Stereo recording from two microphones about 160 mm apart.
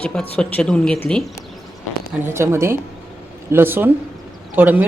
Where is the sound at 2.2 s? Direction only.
15° right (ahead or behind).